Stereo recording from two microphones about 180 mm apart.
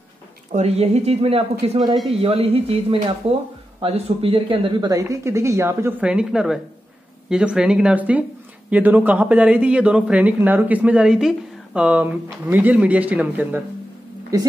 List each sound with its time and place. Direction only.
0.5 s speech: 35° right (ahead or behind); by 14.5 s 20° right (ahead or behind)